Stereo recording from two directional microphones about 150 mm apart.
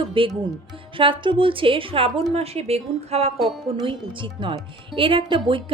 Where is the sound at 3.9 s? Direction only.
35° right (ahead or behind).